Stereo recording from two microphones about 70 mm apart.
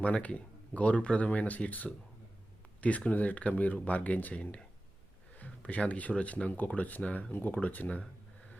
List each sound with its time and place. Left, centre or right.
0.0 s speech: centre